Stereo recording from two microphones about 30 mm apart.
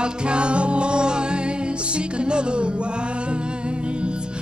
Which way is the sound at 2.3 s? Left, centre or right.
Right.